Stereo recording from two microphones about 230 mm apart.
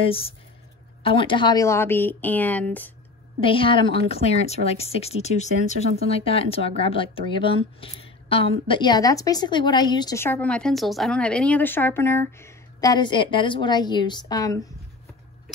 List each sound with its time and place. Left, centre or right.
0.0 s a woman's voice: left; by 2.9 s centre
3.3 s a woman's voice: left